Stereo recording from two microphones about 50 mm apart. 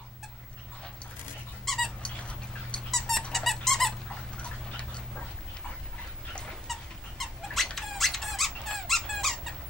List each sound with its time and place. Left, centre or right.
2.0 s bird: left
2.9 s squeak: centre
4.4 s tick-tock: left
6.7 s squeak: centre